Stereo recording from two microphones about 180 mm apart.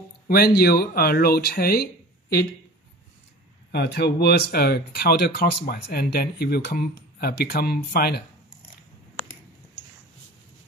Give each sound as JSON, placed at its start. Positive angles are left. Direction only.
{"t": 0.6, "sound": "speech", "side_deg": 60}
{"t": 3.7, "sound": "speech", "side_deg": 65}